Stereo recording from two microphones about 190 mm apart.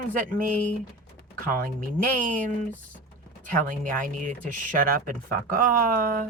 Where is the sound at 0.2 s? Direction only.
45° right (ahead or behind).